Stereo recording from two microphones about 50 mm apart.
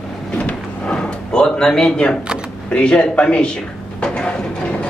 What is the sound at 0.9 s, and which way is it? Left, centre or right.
Speech, centre.